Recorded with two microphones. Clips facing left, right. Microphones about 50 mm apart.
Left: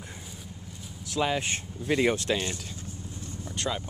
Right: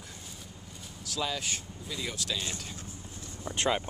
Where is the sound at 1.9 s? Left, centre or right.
Left.